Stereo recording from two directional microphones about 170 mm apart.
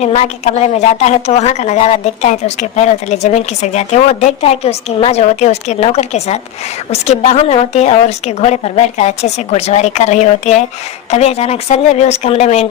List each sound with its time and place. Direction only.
0.0 s a woman's voice: 40° left (ahead or behind)